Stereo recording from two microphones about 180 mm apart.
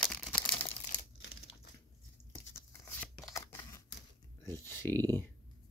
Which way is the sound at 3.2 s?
15° left (ahead or behind).